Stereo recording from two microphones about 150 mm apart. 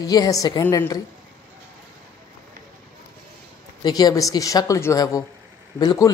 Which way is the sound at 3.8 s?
25° left (ahead or behind).